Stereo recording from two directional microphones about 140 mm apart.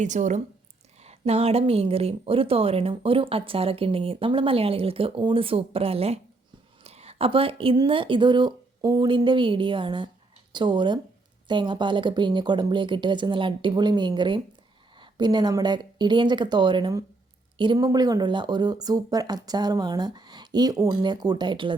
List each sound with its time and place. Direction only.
0.0 s speech: 60° right (ahead or behind)
1.0 s speech: 45° right (ahead or behind)
6.8 s a sound: 50° right (ahead or behind)
7.8 s speech: 40° right (ahead or behind)